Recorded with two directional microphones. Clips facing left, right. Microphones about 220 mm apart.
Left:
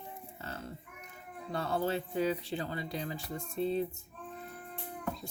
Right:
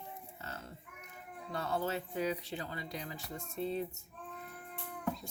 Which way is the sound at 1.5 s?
30° left (ahead or behind).